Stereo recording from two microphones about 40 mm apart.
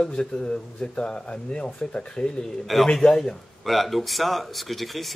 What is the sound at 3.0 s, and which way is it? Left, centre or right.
Speech, centre.